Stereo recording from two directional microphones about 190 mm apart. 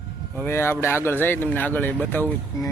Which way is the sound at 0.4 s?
10° left (ahead or behind).